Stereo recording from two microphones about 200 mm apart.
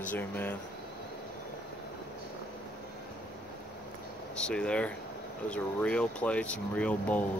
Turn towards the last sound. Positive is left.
turn(degrees=5)  # may be behind; listen again after turning